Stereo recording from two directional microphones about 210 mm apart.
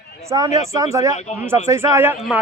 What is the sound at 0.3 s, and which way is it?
A man's voice, 15° right (ahead or behind).